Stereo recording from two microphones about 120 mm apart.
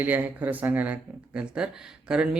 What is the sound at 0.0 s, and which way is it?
Speech, 15° right (ahead or behind).